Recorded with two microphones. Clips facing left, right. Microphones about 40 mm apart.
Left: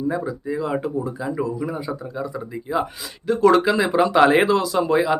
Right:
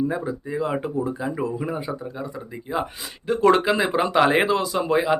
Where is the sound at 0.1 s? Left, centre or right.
Right.